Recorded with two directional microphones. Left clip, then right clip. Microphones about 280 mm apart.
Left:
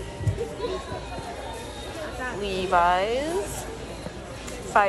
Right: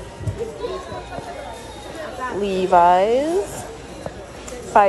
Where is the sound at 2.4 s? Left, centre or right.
Centre.